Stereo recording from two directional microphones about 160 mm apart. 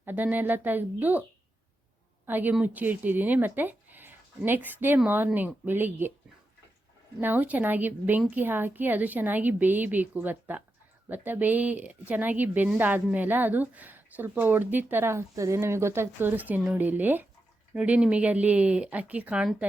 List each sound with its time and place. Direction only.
0.0 s speech: 10° right (ahead or behind)
2.2 s speech: 10° right (ahead or behind)
7.2 s speech: 10° right (ahead or behind)